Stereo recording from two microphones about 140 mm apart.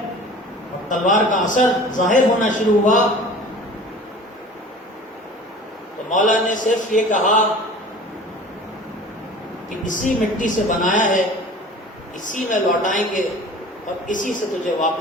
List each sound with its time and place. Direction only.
0.9 s a man's voice: 65° left (ahead or behind)
6.1 s a man's voice: 65° left (ahead or behind)
9.8 s a man's voice: 65° left (ahead or behind)
12.2 s a man's voice: 65° left (ahead or behind)